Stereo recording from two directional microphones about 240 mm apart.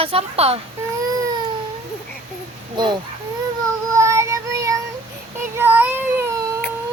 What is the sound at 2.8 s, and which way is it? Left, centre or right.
Speech, centre.